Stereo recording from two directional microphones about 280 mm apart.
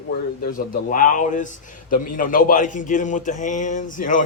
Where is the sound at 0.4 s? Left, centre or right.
Left.